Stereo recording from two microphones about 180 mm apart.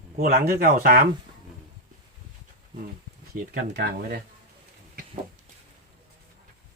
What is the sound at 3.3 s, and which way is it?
Speech, 60° right (ahead or behind).